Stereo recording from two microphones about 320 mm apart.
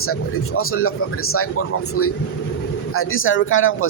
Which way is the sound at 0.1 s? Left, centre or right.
Left.